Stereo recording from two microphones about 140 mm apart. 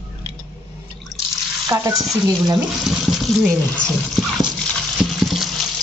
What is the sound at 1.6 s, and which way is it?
Stir, 25° right (ahead or behind).